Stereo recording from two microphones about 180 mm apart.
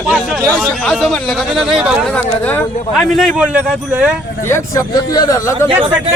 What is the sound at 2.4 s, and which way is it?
Speech, 10° left (ahead or behind).